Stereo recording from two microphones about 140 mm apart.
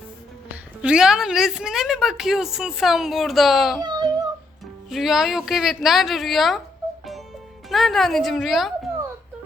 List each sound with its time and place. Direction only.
0.8 s a woman's voice: 5° right (ahead or behind)
3.8 s speech: 30° right (ahead or behind)
4.9 s a woman's voice: centre (ahead or behind)
7.7 s a woman's voice: centre (ahead or behind)